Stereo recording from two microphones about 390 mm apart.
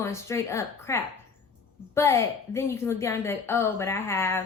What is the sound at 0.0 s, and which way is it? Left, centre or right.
A woman's voice, centre.